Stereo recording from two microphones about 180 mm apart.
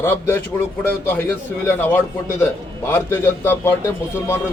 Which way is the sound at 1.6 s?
10° left (ahead or behind).